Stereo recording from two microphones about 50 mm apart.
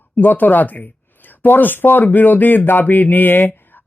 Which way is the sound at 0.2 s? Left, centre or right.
Left.